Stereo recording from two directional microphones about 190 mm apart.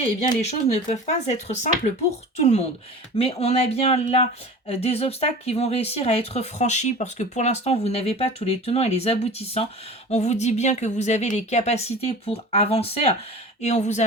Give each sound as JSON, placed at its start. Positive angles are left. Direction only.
{"t": 0.2, "sound": "speech", "side_deg": 35}